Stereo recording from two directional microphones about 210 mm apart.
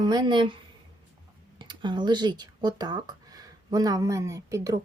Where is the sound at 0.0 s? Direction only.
20° right (ahead or behind).